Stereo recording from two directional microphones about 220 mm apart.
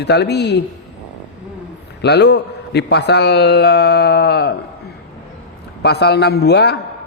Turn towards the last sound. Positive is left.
turn(degrees=50)  # may be behind; listen again after turning